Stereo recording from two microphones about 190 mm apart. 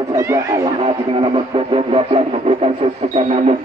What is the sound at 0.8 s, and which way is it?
Speech, 30° right (ahead or behind).